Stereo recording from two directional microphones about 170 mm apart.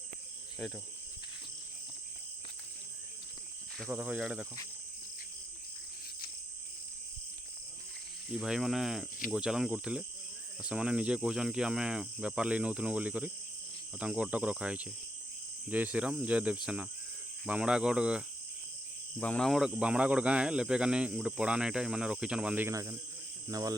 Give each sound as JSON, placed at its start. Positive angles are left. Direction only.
{"t": 3.8, "sound": "speech", "side_deg": -5}
{"t": 8.3, "sound": "speech", "side_deg": -5}
{"t": 14.0, "sound": "cricket", "side_deg": -5}
{"t": 16.6, "sound": "speech", "side_deg": -5}
{"t": 19.2, "sound": "speech", "side_deg": 5}